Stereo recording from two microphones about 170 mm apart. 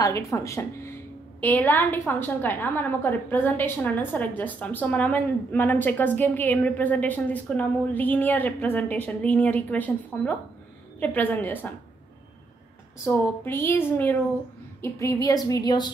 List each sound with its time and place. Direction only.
0.0 s a woman's voice: 20° left (ahead or behind)
13.0 s a woman's voice: 15° left (ahead or behind)